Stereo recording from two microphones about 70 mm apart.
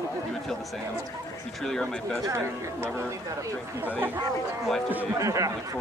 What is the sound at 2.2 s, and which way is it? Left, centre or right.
Speech, right.